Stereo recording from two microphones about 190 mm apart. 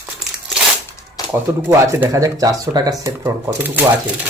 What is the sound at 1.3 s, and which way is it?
Speech, 10° right (ahead or behind).